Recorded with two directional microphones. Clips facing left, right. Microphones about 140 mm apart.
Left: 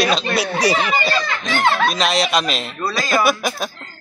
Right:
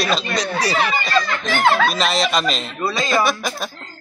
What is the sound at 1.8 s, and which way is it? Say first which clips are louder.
Speech: left 1 dB; centre (ahead or behind).